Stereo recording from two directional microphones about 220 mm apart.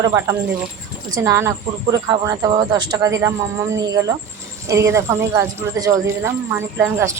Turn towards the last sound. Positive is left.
turn(degrees=-10)  # may be behind; listen again after turning